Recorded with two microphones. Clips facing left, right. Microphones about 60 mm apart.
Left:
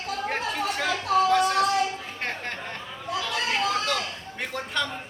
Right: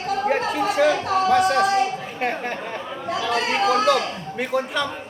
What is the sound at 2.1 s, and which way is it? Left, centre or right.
Speech, centre.